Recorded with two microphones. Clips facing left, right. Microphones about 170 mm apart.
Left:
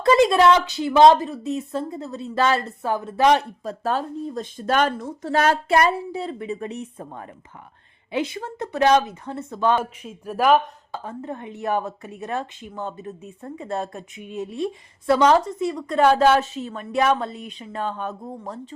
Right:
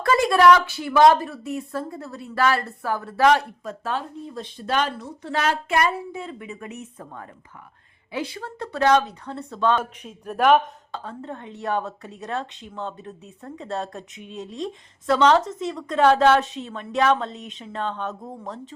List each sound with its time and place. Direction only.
0.0 s speech: 20° left (ahead or behind)
3.6 s speech: 40° left (ahead or behind)
7.0 s speech: 20° left (ahead or behind)
12.5 s a woman's voice: 5° left (ahead or behind)
13.7 s speech: 15° left (ahead or behind)
13.9 s a woman's voice: 5° left (ahead or behind)